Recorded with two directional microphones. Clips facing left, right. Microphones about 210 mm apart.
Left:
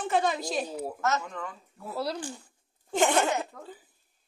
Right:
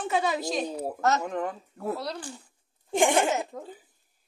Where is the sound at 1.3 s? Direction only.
55° right (ahead or behind).